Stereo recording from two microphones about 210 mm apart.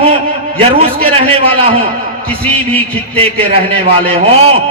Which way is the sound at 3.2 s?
25° right (ahead or behind).